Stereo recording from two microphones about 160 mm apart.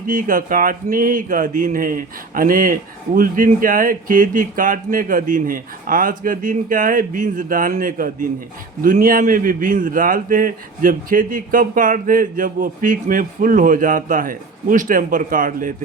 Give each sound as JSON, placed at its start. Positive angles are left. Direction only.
{"t": 0.1, "sound": "a man's voice", "side_deg": -55}